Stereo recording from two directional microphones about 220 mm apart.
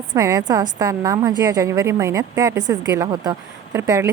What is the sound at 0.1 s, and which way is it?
A woman's voice, 15° right (ahead or behind).